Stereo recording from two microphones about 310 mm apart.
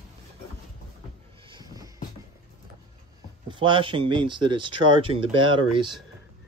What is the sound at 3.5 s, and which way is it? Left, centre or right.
Speech, centre.